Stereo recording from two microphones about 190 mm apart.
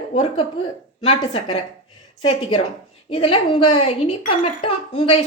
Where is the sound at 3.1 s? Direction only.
30° left (ahead or behind).